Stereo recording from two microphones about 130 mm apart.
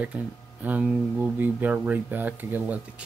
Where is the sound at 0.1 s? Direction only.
10° right (ahead or behind).